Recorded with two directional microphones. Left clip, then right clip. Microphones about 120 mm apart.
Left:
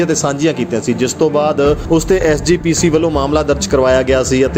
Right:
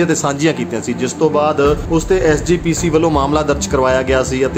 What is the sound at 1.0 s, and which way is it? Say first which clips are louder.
Speech: even; 45° left (ahead or behind).